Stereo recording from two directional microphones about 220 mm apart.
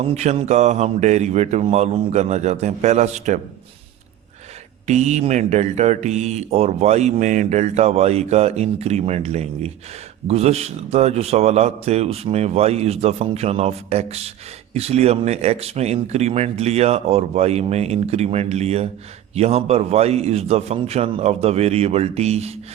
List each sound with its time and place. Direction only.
0.0 s speech: 30° right (ahead or behind)
4.9 s speech: 30° right (ahead or behind)